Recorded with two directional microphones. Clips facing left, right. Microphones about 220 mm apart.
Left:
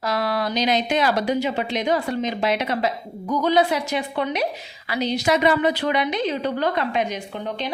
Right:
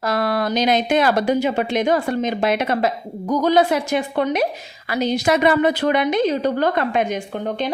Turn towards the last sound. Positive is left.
turn(degrees=-50)  # may be behind; listen again after turning